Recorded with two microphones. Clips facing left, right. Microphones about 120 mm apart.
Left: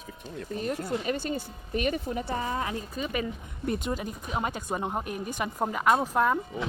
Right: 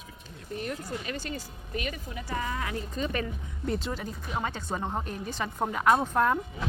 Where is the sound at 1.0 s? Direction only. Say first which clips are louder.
Left 6 dB; 30° left (ahead or behind).